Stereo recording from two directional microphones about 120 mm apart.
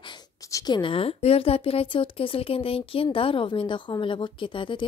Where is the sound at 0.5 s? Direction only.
30° left (ahead or behind).